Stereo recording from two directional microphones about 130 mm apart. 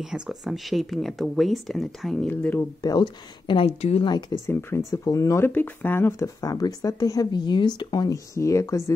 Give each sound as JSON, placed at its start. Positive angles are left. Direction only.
{"t": 0.0, "sound": "speech", "side_deg": -5}
{"t": 2.2, "sound": "speech", "side_deg": 10}
{"t": 2.8, "sound": "speech", "side_deg": 35}
{"t": 4.5, "sound": "speech", "side_deg": 15}